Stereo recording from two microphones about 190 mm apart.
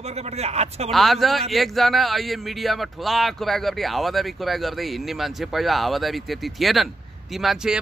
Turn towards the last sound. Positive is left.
turn(degrees=0)  # may be behind; listen again after turning